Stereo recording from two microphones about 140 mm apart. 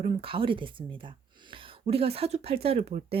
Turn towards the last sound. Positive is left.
turn(degrees=-45)  # may be behind; listen again after turning